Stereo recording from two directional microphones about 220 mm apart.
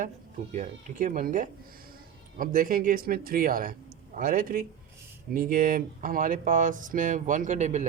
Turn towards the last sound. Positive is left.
turn(degrees=-30)  # may be behind; listen again after turning